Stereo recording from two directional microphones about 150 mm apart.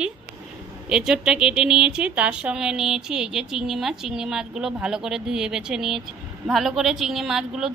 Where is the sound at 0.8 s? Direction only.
5° right (ahead or behind).